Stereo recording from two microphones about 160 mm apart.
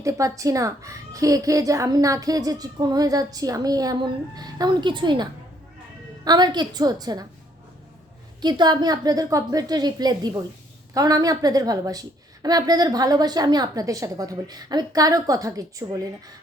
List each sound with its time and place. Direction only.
0.0 s a woman's voice: 20° right (ahead or behind)
8.4 s a woman's voice: 25° right (ahead or behind)